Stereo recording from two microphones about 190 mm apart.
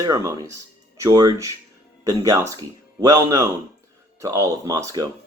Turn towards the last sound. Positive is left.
turn(degrees=-20)  # may be behind; listen again after turning